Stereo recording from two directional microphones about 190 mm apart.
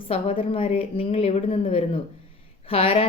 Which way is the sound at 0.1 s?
30° left (ahead or behind).